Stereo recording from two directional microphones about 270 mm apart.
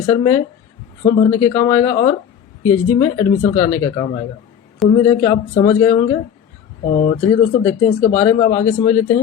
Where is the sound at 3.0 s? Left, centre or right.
Centre.